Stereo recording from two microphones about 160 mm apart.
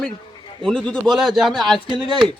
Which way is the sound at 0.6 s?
5° left (ahead or behind).